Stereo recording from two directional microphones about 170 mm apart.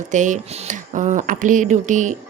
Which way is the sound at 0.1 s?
45° right (ahead or behind).